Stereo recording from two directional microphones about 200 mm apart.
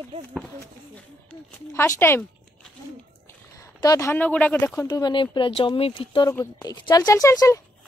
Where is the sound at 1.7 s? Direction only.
15° left (ahead or behind).